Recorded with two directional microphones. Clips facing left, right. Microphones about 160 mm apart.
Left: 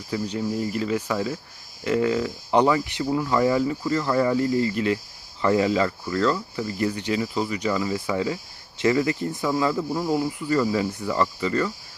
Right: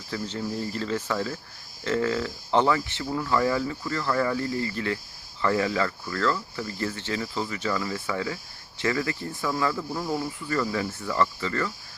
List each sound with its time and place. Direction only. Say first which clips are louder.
0.1 s speech: left 4 dB; 15° left (ahead or behind)